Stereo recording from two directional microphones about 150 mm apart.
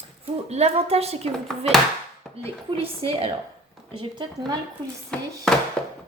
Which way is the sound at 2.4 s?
40° right (ahead or behind).